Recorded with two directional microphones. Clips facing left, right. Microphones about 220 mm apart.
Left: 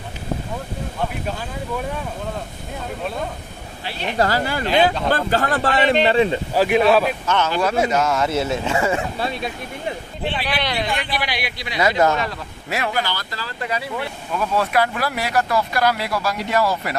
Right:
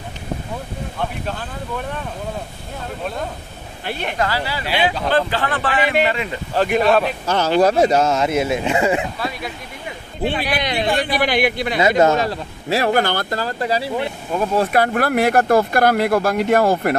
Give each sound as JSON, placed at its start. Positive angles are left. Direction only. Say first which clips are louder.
{"t": 3.8, "sound": "speech", "louder": "right 3 dB", "side_deg": -50}
{"t": 4.2, "sound": "a man's voice", "louder": "left 5 dB", "side_deg": 45}
{"t": 6.5, "sound": "speech", "louder": "right 1 dB", "side_deg": 5}
{"t": 7.2, "sound": "speech", "louder": "right 5 dB", "side_deg": -35}
{"t": 9.2, "sound": "speech", "louder": "left 1 dB", "side_deg": 25}
{"t": 10.6, "sound": "speech", "louder": "right 2 dB", "side_deg": -20}
{"t": 11.0, "sound": "speech", "louder": "right 8 dB", "side_deg": -45}
{"t": 12.2, "sound": "speech", "louder": "right 5 dB", "side_deg": -30}
{"t": 12.8, "sound": "speech", "louder": "right 6 dB", "side_deg": -50}
{"t": 13.7, "sound": "speech", "louder": "right 3 dB", "side_deg": -30}
{"t": 14.4, "sound": "speech", "louder": "right 3 dB", "side_deg": -40}